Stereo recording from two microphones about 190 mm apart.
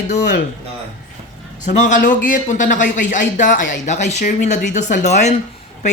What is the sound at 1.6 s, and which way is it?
Speech, 40° left (ahead or behind).